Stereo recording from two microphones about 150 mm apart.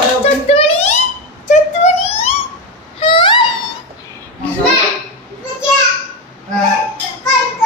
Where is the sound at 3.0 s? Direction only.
35° left (ahead or behind).